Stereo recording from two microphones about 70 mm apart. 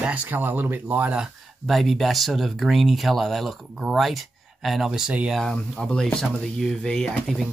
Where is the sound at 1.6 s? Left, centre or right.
Centre.